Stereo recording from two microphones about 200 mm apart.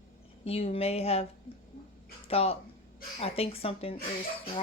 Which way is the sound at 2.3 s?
30° left (ahead or behind).